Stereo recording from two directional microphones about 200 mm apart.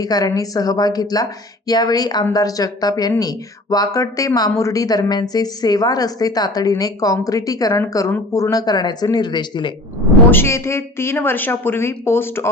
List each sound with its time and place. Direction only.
0.0 s a woman's voice: 20° left (ahead or behind)
10.2 s a woman's voice: 10° left (ahead or behind)